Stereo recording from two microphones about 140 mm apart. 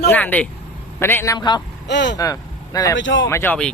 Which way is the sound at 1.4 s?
30° left (ahead or behind).